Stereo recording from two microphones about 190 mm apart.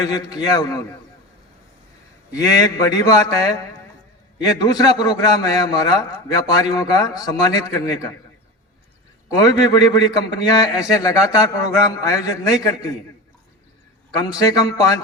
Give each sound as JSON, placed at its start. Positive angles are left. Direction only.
{"t": 0.0, "sound": "a man's voice", "side_deg": 20}
{"t": 2.3, "sound": "a man's voice", "side_deg": 15}
{"t": 4.6, "sound": "a man's voice", "side_deg": 20}
{"t": 9.7, "sound": "a man's voice", "side_deg": 20}
{"t": 14.3, "sound": "a man's voice", "side_deg": 20}